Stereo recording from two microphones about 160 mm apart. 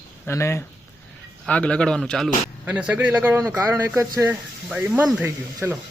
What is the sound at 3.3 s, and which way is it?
Speech, 20° right (ahead or behind).